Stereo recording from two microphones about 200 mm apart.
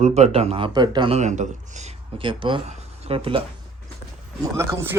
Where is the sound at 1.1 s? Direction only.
35° right (ahead or behind).